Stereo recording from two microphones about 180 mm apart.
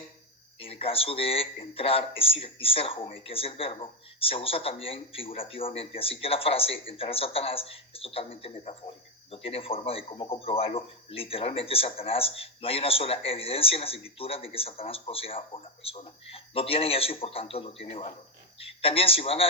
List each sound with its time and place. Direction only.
0.6 s a man's voice: 30° left (ahead or behind)